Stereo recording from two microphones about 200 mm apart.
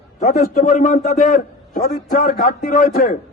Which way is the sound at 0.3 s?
40° left (ahead or behind).